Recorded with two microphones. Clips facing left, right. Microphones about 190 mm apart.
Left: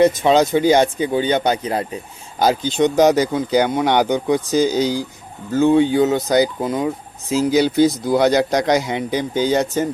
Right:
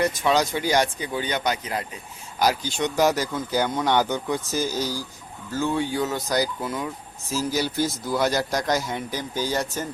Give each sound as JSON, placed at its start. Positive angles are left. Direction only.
{"t": 0.0, "sound": "speech", "side_deg": 25}
{"t": 8.5, "sound": "a man's voice", "side_deg": 70}
{"t": 9.0, "sound": "speech", "side_deg": 20}